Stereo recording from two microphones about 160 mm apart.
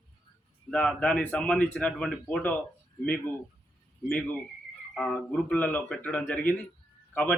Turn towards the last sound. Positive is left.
turn(degrees=10)  # may be behind; listen again after turning